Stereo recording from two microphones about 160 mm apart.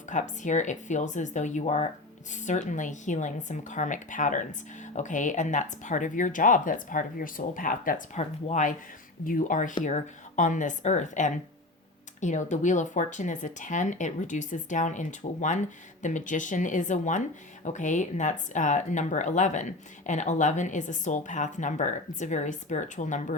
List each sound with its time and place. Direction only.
0.1 s speech: 50° left (ahead or behind)
8.2 s speech: 45° left (ahead or behind)
9.2 s speech: 60° left (ahead or behind)